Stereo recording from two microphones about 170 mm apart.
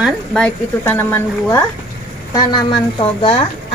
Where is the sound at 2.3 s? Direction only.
25° left (ahead or behind).